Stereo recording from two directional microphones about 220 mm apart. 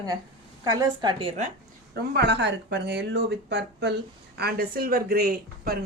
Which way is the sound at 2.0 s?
50° right (ahead or behind).